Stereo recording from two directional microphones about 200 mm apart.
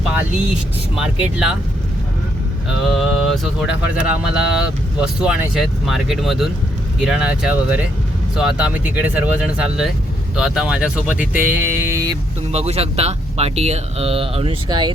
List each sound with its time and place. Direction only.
0.1 s speech: 5° right (ahead or behind)
2.8 s speech: centre (ahead or behind)
12.5 s speech: 30° right (ahead or behind)